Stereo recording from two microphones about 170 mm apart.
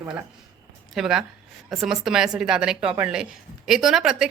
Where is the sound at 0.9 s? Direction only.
5° right (ahead or behind).